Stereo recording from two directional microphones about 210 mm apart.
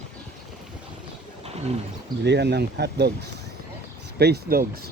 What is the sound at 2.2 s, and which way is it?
Speech, 55° right (ahead or behind).